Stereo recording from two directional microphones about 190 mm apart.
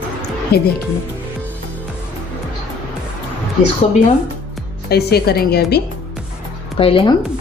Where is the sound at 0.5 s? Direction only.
55° left (ahead or behind).